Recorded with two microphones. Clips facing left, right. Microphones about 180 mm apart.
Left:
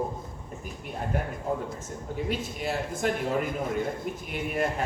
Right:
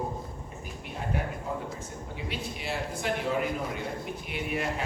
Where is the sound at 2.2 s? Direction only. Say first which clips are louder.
Left 3 dB; 45° left (ahead or behind).